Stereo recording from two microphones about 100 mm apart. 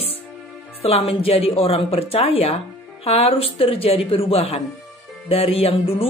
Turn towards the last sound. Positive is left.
turn(degrees=80)